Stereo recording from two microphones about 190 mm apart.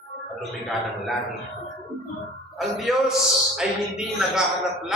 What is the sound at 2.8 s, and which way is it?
A woman's voice, centre (ahead or behind).